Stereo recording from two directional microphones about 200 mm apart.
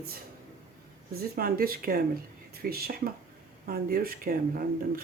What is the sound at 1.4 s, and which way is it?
Speech, 50° right (ahead or behind).